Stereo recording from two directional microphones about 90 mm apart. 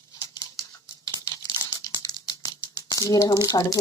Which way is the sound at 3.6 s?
45° left (ahead or behind).